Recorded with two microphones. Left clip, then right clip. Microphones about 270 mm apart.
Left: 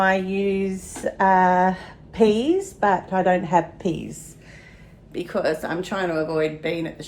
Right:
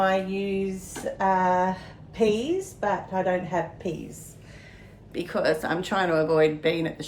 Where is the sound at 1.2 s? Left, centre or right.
Centre.